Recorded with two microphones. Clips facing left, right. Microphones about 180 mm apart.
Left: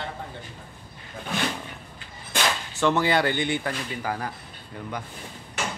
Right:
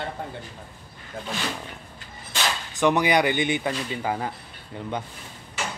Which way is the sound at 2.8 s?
15° right (ahead or behind).